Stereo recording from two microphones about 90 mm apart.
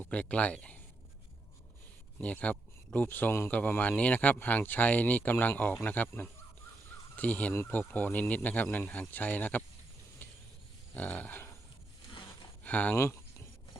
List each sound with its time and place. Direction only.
0.0 s a man's voice: 15° left (ahead or behind)
2.2 s a man's voice: 15° left (ahead or behind)
10.2 s vehicle: 20° left (ahead or behind)
10.9 s speech: 20° left (ahead or behind)
12.6 s speech: 15° left (ahead or behind)